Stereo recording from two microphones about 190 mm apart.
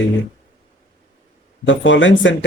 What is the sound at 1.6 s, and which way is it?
Speech, 75° left (ahead or behind).